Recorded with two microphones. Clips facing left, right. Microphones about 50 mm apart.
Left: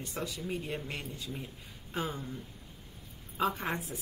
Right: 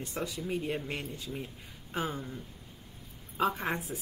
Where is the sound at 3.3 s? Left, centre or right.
Centre.